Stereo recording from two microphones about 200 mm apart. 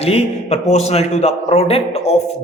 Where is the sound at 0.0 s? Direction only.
30° left (ahead or behind).